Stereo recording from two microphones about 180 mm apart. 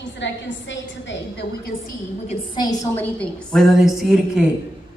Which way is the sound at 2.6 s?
20° left (ahead or behind).